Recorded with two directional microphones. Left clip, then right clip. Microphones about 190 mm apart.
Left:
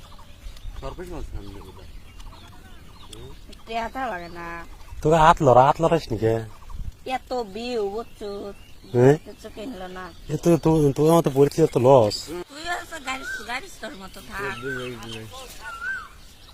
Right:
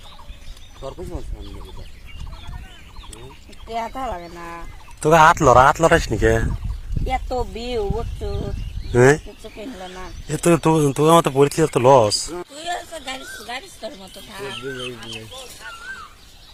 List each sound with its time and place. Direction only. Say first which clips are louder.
0.9 s speech: right 2 dB; 10° left (ahead or behind)
3.7 s speech: right 2 dB; 10° left (ahead or behind); by 6.4 s 10° right (ahead or behind)
7.3 s speech: right 3 dB; 15° left (ahead or behind)
9.0 s speech: right 3 dB; 5° right (ahead or behind)
9.6 s speech: right 1 dB; 5° left (ahead or behind)
13.5 s speech: right 1 dB; 5° right (ahead or behind)
15.1 s speech: right 3 dB; 45° right (ahead or behind)